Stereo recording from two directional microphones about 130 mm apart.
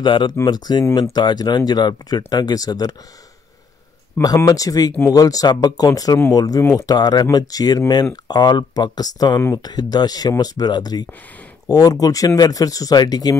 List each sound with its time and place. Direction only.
0.0 s speech: 35° left (ahead or behind)
4.2 s speech: 30° left (ahead or behind)